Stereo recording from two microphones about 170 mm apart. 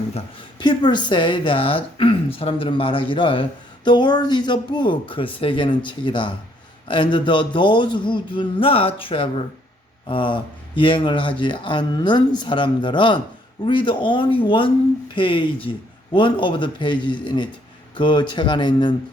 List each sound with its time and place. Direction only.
0.1 s speech: 30° left (ahead or behind)